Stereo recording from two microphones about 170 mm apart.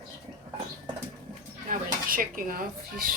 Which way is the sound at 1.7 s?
55° right (ahead or behind).